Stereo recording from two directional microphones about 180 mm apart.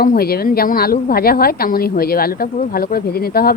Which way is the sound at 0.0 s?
55° left (ahead or behind).